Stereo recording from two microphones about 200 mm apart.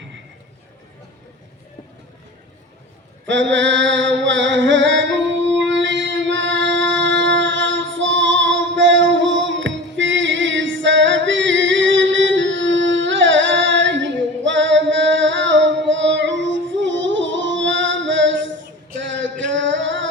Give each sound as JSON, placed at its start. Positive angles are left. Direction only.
{"t": 3.2, "sound": "mantra", "side_deg": -65}
{"t": 19.0, "sound": "music", "side_deg": -65}